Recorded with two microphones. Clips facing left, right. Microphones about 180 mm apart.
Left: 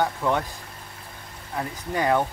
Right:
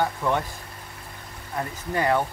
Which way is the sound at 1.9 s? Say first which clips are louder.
Even; 15° left (ahead or behind).